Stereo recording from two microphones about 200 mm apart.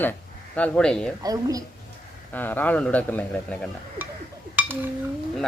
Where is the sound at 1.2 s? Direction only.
15° right (ahead or behind).